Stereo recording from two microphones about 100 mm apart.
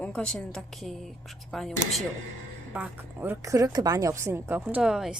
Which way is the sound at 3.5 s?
35° right (ahead or behind).